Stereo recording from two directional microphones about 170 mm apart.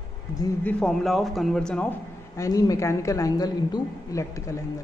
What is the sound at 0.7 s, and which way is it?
A woman's voice, 5° left (ahead or behind).